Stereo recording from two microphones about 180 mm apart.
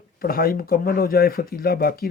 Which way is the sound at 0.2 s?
55° left (ahead or behind).